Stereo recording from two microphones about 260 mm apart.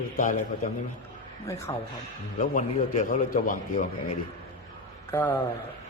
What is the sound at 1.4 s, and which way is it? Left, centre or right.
Speech, centre.